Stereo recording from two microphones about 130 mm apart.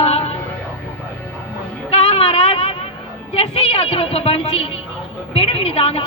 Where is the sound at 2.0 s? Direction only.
45° left (ahead or behind).